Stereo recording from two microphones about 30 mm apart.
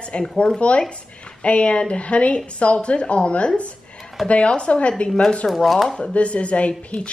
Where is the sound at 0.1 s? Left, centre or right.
Left.